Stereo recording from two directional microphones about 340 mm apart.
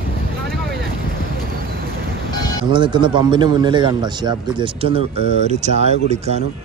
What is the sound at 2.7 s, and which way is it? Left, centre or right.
Speech, centre.